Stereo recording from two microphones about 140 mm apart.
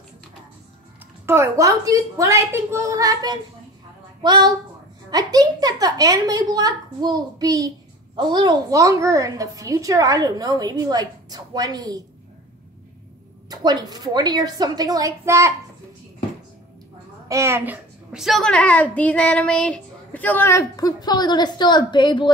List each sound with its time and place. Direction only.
1.2 s a woman's voice: 20° right (ahead or behind)
13.5 s a woman's voice: 30° right (ahead or behind)
17.3 s a woman's voice: 20° right (ahead or behind)
18.1 s a woman's voice: centre (ahead or behind); by 22.3 s 35° left (ahead or behind)